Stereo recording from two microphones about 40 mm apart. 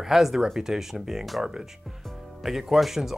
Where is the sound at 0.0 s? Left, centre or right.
Centre.